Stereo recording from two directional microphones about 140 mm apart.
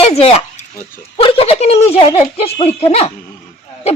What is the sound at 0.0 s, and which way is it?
A woman's voice, 45° left (ahead or behind).